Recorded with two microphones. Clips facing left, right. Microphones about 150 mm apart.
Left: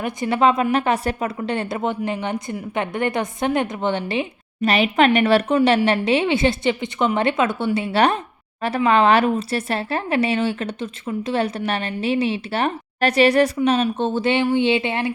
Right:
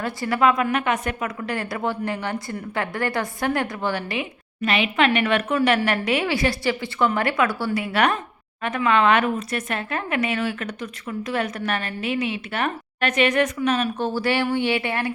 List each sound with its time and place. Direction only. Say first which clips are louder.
0.0 s a woman's voice: left 2 dB; 20° left (ahead or behind)